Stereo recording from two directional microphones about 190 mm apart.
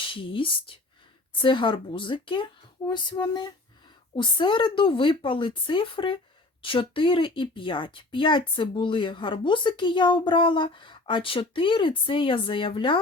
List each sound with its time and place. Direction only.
0.0 s a woman's voice: 25° left (ahead or behind)